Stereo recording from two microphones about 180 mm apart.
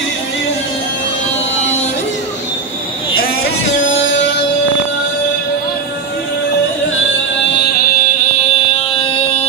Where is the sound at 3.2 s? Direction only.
55° left (ahead or behind).